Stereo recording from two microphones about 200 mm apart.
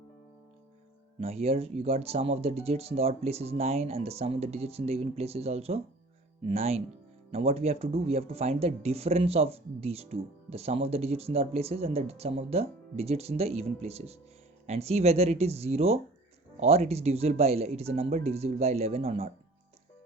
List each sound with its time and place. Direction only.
1.2 s speech: 30° right (ahead or behind)